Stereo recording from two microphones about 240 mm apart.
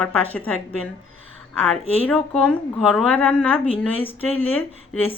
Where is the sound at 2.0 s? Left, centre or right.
Centre.